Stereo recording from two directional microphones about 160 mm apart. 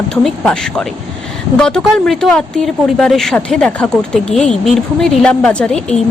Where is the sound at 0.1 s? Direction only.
5° left (ahead or behind).